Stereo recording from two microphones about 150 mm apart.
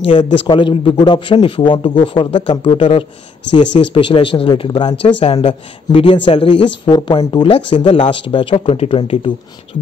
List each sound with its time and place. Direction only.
0.0 s speech: 35° left (ahead or behind)